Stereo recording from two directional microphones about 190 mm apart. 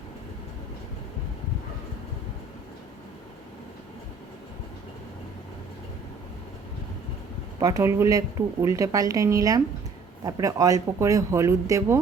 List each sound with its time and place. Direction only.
7.6 s speech: 15° right (ahead or behind)